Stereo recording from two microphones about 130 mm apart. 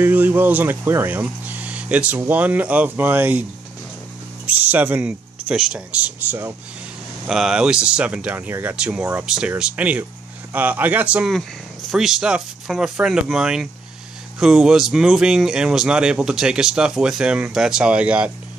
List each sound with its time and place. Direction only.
0.0 s speech: 15° right (ahead or behind)
4.5 s speech: 15° right (ahead or behind)
7.2 s speech: 5° right (ahead or behind)